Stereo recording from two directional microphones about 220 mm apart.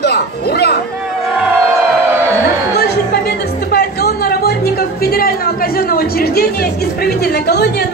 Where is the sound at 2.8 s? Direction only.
50° left (ahead or behind).